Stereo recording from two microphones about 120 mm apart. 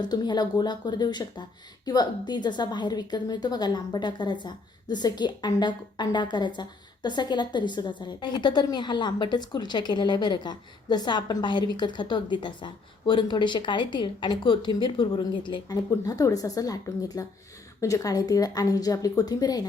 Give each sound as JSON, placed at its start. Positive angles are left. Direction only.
{"t": 0.0, "sound": "speech", "side_deg": 35}
{"t": 15.9, "sound": "speech", "side_deg": 25}